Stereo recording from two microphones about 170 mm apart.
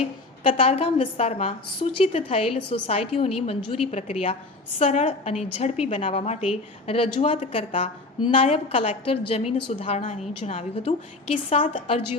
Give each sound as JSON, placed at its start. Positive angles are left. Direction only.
{"t": 0.0, "sound": "a woman's voice", "side_deg": 35}